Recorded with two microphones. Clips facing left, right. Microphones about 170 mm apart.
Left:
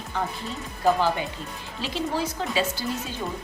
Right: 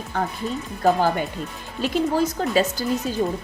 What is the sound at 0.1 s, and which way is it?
A woman's voice, 50° right (ahead or behind).